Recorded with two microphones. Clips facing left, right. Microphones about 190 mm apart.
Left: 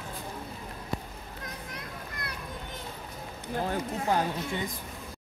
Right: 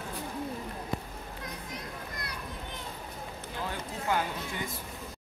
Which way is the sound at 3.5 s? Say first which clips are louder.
Left 7 dB; 45° left (ahead or behind).